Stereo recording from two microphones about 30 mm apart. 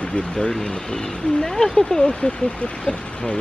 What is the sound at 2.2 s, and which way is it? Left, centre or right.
Speech, left.